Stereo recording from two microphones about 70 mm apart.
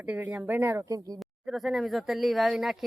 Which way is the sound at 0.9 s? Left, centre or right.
Right.